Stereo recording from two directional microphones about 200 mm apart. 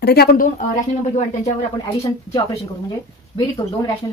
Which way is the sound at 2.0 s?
15° left (ahead or behind).